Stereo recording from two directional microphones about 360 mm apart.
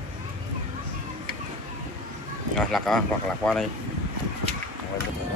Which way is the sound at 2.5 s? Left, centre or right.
Centre.